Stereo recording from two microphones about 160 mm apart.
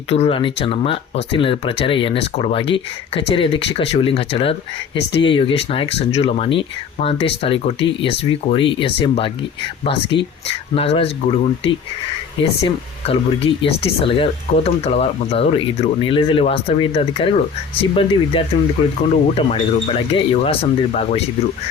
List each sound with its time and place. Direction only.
0.1 s speech: 35° left (ahead or behind)